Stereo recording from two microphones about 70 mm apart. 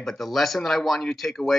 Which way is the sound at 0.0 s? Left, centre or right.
Centre.